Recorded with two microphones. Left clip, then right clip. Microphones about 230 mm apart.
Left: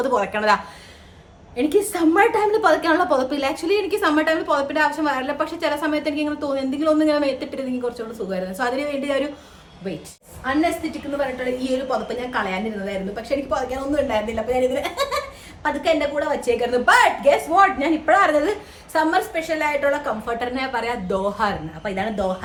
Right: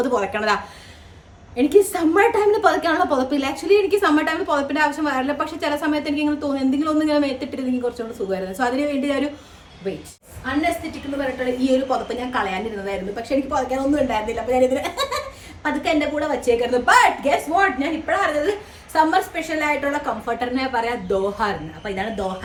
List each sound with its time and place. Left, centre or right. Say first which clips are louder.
0.0 s a woman's voice: left 1 dB; centre
11.6 s a woman's voice: right 6 dB; centre
18.0 s a woman's voice: left 5 dB; left
18.9 s a woman's voice: right 2 dB; centre